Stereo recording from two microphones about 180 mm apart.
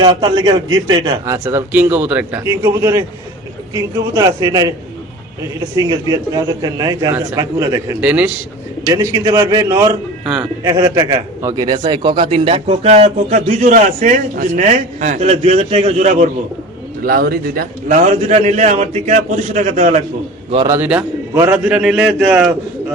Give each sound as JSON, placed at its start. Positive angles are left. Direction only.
{"t": 0.0, "sound": "a man's voice", "side_deg": -25}
{"t": 5.7, "sound": "a man's voice", "side_deg": -20}
{"t": 17.0, "sound": "a man's voice", "side_deg": -60}
{"t": 20.7, "sound": "a man's voice", "side_deg": -10}